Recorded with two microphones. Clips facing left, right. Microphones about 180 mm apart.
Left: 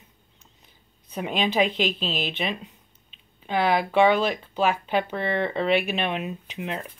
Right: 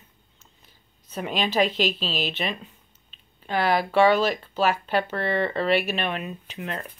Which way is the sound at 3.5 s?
15° left (ahead or behind).